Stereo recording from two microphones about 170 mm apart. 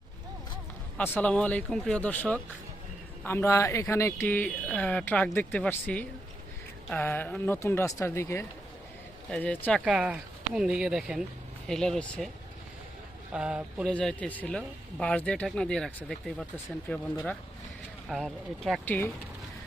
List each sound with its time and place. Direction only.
0.9 s speech: 10° left (ahead or behind)
9.8 s speech: 5° right (ahead or behind)
13.3 s speech: 5° right (ahead or behind)
18.1 s speech: centre (ahead or behind)
18.9 s speech: 10° left (ahead or behind)